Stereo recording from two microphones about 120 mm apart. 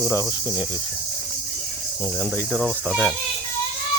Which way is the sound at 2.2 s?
15° left (ahead or behind).